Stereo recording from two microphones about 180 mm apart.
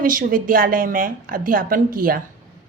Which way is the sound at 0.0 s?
50° right (ahead or behind).